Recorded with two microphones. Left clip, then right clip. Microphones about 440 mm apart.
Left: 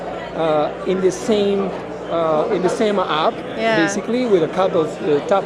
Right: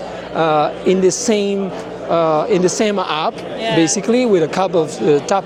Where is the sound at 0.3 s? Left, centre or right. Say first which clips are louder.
Right 4 dB; right.